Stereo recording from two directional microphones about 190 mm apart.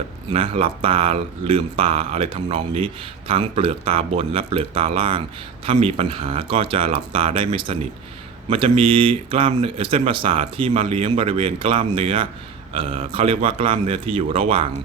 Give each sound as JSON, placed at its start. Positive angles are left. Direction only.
{"t": 0.3, "sound": "speech", "side_deg": -30}